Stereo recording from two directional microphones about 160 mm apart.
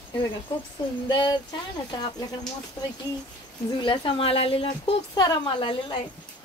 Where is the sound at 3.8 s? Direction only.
30° left (ahead or behind).